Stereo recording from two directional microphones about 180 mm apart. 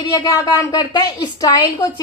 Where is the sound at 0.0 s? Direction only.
25° left (ahead or behind).